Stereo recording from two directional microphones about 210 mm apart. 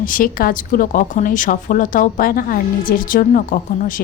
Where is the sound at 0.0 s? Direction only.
40° left (ahead or behind).